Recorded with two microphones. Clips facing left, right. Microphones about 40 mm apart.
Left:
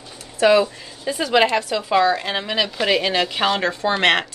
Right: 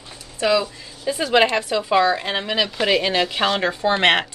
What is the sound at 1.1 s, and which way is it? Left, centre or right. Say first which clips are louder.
A woman's voice: even; centre.